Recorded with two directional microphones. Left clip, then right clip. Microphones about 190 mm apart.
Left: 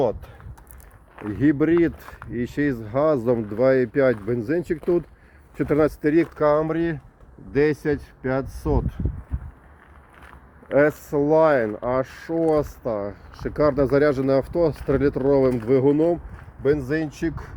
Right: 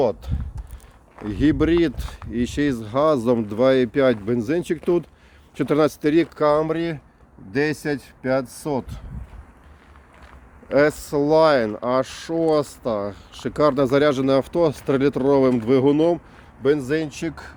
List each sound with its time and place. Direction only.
0.0 s speech: 15° right (ahead or behind)
3.5 s speech: 10° right (ahead or behind)
10.8 s speech: 15° right (ahead or behind)
11.7 s speech: 5° right (ahead or behind)
11.9 s speech: 20° right (ahead or behind)
13.0 s speech: 10° right (ahead or behind)